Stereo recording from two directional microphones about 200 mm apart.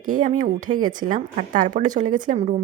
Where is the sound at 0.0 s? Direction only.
40° right (ahead or behind).